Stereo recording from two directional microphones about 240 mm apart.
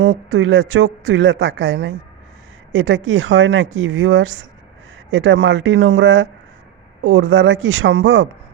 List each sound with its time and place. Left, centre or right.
0.0 s a woman's voice: right